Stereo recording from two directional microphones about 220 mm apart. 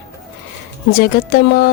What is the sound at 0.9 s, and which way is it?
Speech, 45° left (ahead or behind).